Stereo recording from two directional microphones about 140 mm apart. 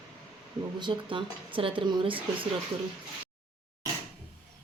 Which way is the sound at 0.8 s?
35° right (ahead or behind).